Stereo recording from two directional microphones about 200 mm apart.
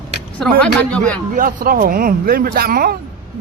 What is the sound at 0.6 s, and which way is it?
Speech, 5° left (ahead or behind).